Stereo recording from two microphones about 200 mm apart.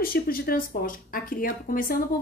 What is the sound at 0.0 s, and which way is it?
Speech, 45° left (ahead or behind).